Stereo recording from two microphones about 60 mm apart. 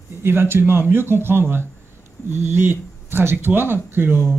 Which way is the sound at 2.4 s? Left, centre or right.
Right.